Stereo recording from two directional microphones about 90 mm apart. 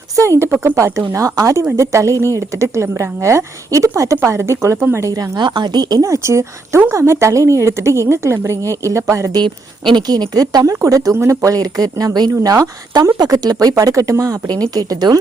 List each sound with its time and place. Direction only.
0.2 s speech: 30° right (ahead or behind)
5.1 s speech: 45° right (ahead or behind)
9.9 s speech: 50° right (ahead or behind)